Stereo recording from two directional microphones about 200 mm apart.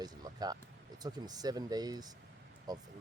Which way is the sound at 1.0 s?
20° right (ahead or behind).